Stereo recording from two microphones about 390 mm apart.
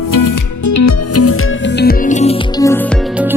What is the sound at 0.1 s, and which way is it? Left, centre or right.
Music, left.